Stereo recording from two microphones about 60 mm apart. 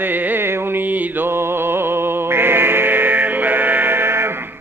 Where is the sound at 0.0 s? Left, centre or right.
Right.